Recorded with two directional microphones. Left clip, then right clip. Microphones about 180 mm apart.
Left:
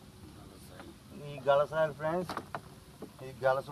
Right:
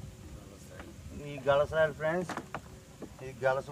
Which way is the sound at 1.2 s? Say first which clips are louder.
Even; centre (ahead or behind).